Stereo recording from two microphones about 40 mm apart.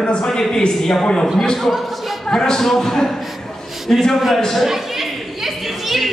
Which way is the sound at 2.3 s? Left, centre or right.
Centre.